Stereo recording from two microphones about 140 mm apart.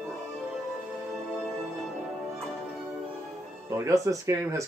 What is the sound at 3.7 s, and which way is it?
Speech, 20° right (ahead or behind).